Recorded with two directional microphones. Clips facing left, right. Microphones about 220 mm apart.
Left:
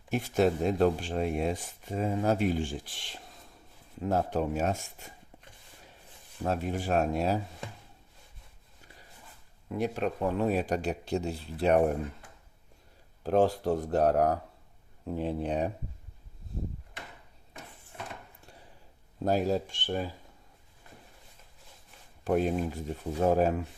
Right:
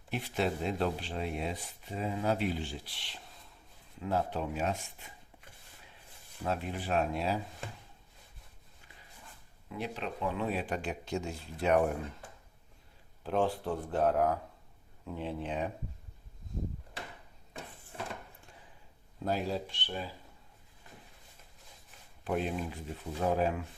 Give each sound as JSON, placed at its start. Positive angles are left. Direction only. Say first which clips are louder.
{"t": 0.1, "sound": "speech", "louder": "left 7 dB", "side_deg": 45}
{"t": 6.4, "sound": "speech", "louder": "left 4 dB", "side_deg": 45}
{"t": 9.6, "sound": "speech", "louder": "left 8 dB", "side_deg": 50}
{"t": 13.2, "sound": "speech", "louder": "left 6 dB", "side_deg": 40}
{"t": 19.2, "sound": "speech", "louder": "left 6 dB", "side_deg": 45}
{"t": 22.2, "sound": "speech", "louder": "left 6 dB", "side_deg": 45}